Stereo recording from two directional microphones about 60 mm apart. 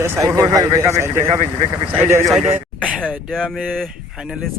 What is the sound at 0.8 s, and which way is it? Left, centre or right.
Speech, right.